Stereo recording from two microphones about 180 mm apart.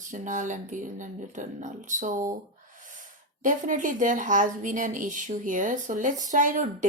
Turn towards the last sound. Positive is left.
turn(degrees=-45)  # may be behind; listen again after turning